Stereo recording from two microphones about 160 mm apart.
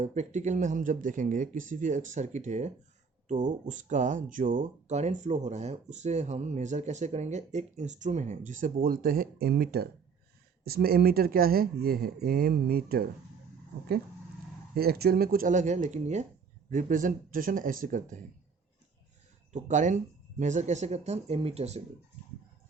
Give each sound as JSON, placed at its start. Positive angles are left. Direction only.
{"t": 0.0, "sound": "speech", "side_deg": -45}
{"t": 14.8, "sound": "speech", "side_deg": -75}
{"t": 19.5, "sound": "speech", "side_deg": -50}